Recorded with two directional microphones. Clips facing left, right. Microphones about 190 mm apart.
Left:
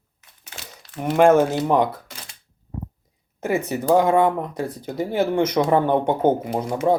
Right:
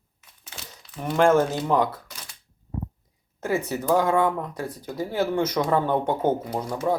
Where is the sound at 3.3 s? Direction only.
20° left (ahead or behind).